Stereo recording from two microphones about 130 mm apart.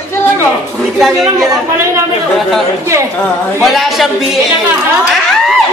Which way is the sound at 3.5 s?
Centre (ahead or behind).